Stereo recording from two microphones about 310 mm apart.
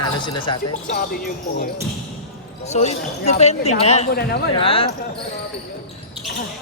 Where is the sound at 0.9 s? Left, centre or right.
Left.